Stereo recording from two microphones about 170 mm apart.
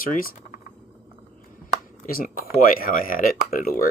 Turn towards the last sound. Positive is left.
turn(degrees=55)  # may be behind; listen again after turning